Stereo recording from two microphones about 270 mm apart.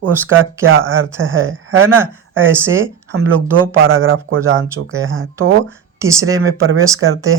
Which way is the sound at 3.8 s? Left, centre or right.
Right.